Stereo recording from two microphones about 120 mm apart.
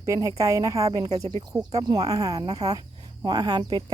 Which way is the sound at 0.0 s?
30° right (ahead or behind).